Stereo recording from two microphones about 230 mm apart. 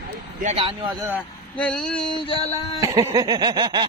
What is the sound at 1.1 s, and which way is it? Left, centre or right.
Speech, centre.